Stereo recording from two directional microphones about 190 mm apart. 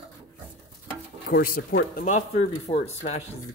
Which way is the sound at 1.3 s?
50° left (ahead or behind).